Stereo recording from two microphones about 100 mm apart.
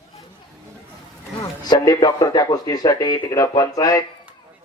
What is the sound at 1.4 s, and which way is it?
Speech, 40° left (ahead or behind).